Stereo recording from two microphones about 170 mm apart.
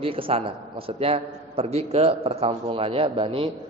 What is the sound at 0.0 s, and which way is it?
A man's voice, 35° right (ahead or behind).